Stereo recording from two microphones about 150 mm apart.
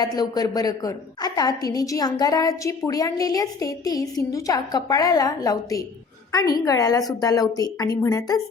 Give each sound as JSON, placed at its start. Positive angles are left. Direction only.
{"t": 0.0, "sound": "a woman's voice", "side_deg": 25}